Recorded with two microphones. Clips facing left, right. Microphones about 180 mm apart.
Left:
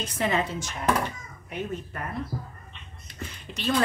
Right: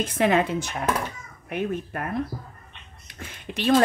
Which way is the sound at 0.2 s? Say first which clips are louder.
Right 5 dB; 55° right (ahead or behind).